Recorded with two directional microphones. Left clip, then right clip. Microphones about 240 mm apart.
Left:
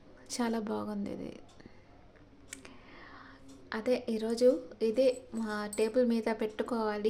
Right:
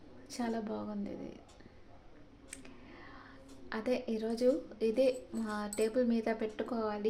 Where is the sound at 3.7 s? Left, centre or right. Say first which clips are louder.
Left 3 dB; centre.